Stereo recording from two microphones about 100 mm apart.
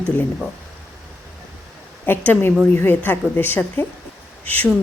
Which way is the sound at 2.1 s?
20° left (ahead or behind).